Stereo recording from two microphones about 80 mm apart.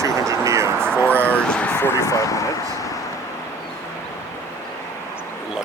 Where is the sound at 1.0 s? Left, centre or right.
Centre.